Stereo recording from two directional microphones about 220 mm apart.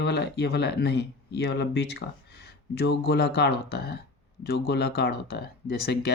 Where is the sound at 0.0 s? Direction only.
50° left (ahead or behind).